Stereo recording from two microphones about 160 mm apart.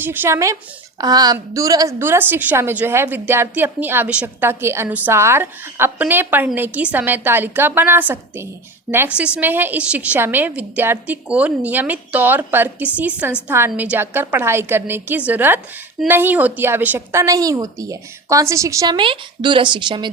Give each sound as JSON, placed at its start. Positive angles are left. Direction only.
{"t": 0.0, "sound": "a woman's voice", "side_deg": -15}